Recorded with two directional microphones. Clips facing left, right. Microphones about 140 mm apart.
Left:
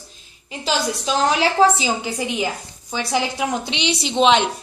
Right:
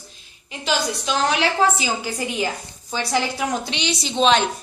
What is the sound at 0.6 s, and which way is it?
A woman's voice, 35° left (ahead or behind).